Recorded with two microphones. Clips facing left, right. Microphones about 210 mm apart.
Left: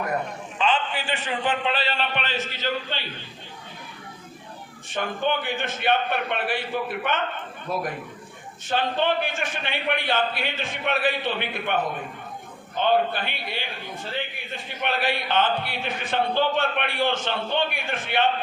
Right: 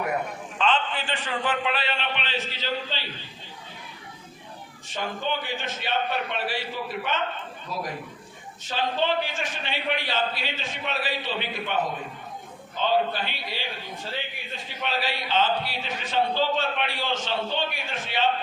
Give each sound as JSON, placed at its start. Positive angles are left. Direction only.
{"t": 0.6, "sound": "a man's voice", "side_deg": 10}
{"t": 4.9, "sound": "a man's voice", "side_deg": 55}